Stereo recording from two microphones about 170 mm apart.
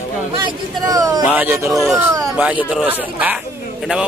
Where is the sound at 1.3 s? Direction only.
10° right (ahead or behind).